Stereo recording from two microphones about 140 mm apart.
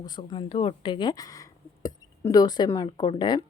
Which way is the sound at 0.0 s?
30° left (ahead or behind).